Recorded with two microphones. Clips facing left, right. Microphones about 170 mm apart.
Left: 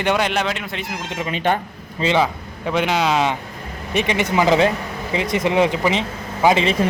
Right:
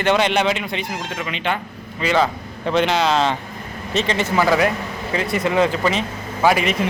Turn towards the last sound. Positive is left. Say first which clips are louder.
# left 1 dB
turn(degrees=20)  # may be behind; listen again after turning